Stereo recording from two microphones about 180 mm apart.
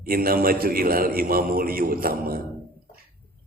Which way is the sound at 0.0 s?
55° right (ahead or behind).